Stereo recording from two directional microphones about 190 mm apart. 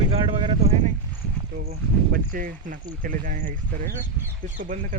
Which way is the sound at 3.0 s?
45° right (ahead or behind).